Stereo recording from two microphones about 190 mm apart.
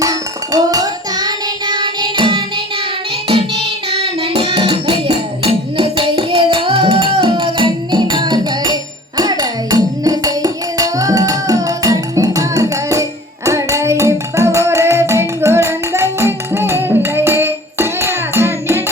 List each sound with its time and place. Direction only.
0.0 s child singing: 20° right (ahead or behind)
3.2 s music: 30° right (ahead or behind); by 18.8 s 15° right (ahead or behind)